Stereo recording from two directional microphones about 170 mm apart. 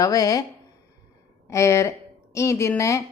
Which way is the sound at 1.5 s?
15° left (ahead or behind).